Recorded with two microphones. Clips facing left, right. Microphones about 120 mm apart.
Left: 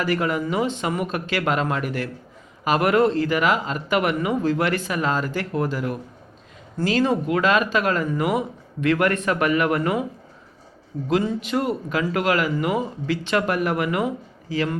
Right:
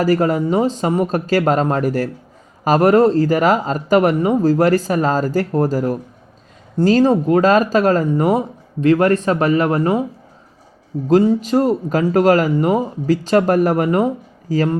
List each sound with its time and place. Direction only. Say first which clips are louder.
0.0 s speech: right 7 dB; 40° right (ahead or behind)
11.1 s speech: right 9 dB; 35° right (ahead or behind)